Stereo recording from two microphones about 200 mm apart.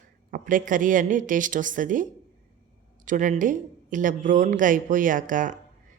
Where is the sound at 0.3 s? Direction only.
45° right (ahead or behind).